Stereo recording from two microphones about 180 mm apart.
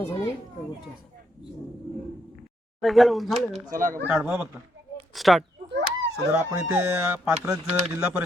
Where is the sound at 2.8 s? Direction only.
Centre (ahead or behind).